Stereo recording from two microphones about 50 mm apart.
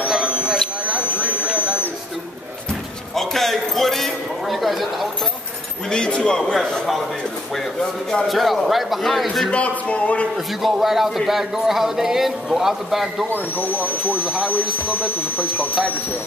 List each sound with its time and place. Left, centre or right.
3.2 s a sound: centre
5.9 s a man's voice: centre
8.3 s a man's voice: centre
9.5 s speech: left
10.3 s a man's voice: centre
13.3 s speech: left
14.2 s speech: right